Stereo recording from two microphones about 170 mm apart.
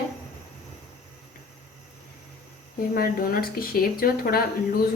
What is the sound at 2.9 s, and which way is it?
Speech, 60° left (ahead or behind).